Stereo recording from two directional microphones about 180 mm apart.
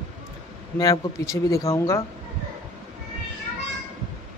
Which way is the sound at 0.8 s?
15° left (ahead or behind).